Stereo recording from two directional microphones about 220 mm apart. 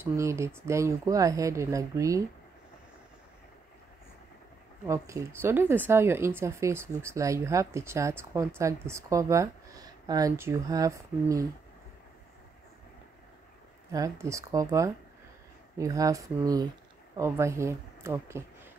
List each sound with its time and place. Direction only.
0.0 s speech: 15° right (ahead or behind)
4.8 s speech: 15° right (ahead or behind)
13.9 s speech: 15° right (ahead or behind)